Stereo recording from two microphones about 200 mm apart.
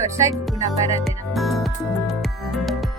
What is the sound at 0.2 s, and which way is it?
Speech, 15° right (ahead or behind).